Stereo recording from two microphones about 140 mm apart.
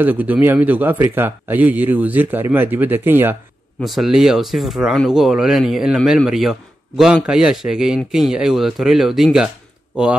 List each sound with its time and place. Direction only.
0.0 s a man's voice: 15° right (ahead or behind)
3.8 s speech: centre (ahead or behind)